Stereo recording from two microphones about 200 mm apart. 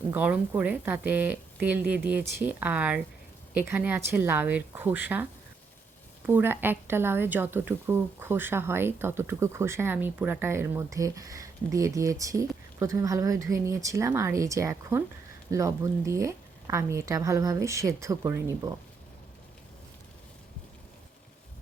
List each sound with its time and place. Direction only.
0.1 s a woman's voice: 10° right (ahead or behind)